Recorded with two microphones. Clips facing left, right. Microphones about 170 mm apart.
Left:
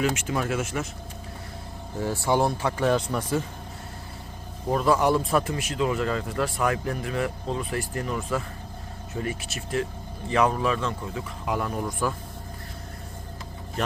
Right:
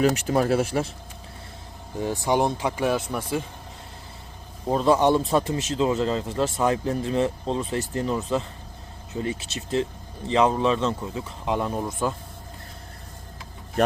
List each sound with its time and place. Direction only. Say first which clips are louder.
0.0 s speech: right 5 dB; 40° right (ahead or behind)
2.0 s speech: right 1 dB; 15° right (ahead or behind)
4.7 s speech: right 2 dB; 25° right (ahead or behind)